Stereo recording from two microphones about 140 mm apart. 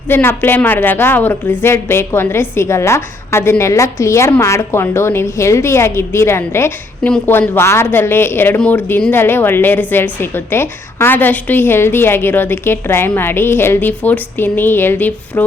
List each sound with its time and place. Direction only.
0.1 s a woman's voice: 15° left (ahead or behind)